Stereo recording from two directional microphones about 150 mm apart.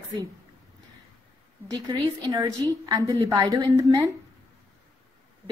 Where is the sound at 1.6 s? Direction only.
25° right (ahead or behind).